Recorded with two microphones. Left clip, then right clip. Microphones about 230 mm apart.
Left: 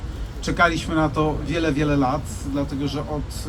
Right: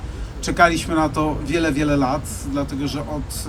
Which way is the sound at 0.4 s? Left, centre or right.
Right.